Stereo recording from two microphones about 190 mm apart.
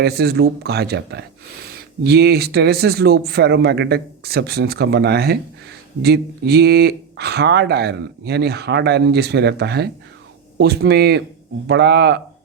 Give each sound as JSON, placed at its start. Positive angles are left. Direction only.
{"t": 0.0, "sound": "speech", "side_deg": -60}